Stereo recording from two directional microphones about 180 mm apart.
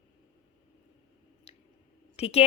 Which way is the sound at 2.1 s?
35° left (ahead or behind).